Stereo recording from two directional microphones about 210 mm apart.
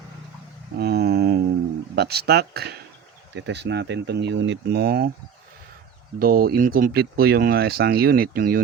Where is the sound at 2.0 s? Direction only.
50° right (ahead or behind).